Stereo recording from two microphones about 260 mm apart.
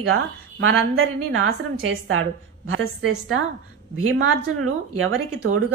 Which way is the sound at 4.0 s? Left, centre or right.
Right.